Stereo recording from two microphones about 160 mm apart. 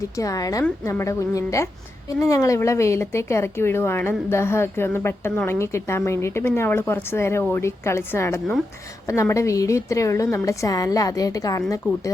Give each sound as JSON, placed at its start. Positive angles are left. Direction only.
{"t": 0.2, "sound": "a woman's voice", "side_deg": 20}